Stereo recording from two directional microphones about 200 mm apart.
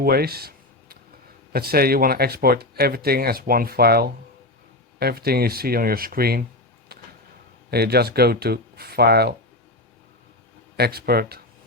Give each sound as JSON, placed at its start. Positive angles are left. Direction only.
{"t": 0.0, "sound": "a sound", "side_deg": -50}
{"t": 1.5, "sound": "speech", "side_deg": -50}
{"t": 7.7, "sound": "speech", "side_deg": -55}
{"t": 10.8, "sound": "speech", "side_deg": -50}